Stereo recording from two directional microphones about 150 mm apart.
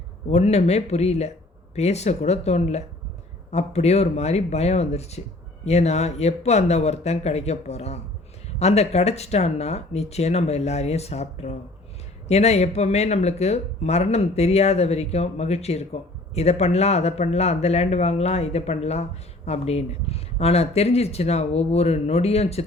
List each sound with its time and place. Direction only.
0.3 s speech: 45° left (ahead or behind)